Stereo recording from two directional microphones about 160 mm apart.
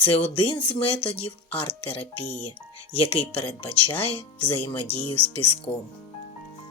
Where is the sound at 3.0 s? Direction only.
10° left (ahead or behind).